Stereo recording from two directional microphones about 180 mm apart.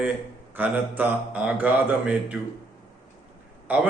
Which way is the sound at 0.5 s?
10° right (ahead or behind).